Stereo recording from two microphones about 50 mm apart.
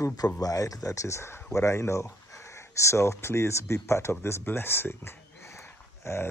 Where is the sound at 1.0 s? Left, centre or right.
Left.